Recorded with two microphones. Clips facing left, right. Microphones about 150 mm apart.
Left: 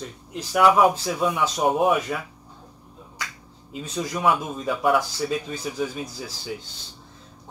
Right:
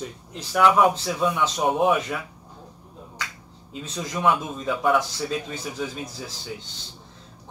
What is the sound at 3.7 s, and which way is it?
A man's voice, 5° left (ahead or behind).